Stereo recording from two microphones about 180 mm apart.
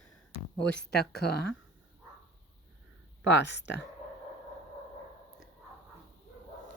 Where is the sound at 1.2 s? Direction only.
60° left (ahead or behind).